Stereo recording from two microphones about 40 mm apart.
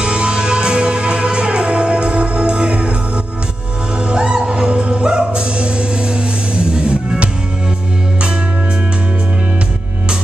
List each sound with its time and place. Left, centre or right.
0.0 s music: right
4.1 s music: right